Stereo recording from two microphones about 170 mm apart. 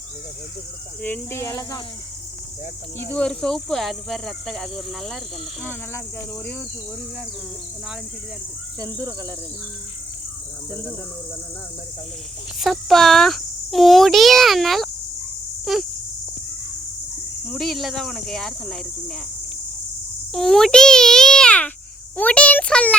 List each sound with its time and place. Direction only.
1.0 s a child's voice: 10° left (ahead or behind)
3.0 s a child's voice: 10° left (ahead or behind)
8.8 s speech: 20° right (ahead or behind)
12.5 s a child's voice: centre (ahead or behind)
17.5 s a child's voice: centre (ahead or behind)
20.3 s a child's voice: centre (ahead or behind)